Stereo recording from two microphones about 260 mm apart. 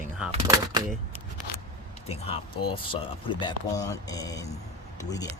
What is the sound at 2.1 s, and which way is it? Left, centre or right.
Speech, left.